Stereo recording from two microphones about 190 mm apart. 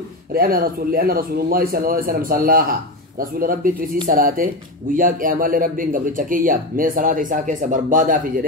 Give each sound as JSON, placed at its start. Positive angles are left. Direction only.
{"t": 0.3, "sound": "speech", "side_deg": -50}